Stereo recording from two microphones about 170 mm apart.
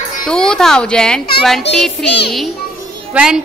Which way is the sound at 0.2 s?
5° left (ahead or behind).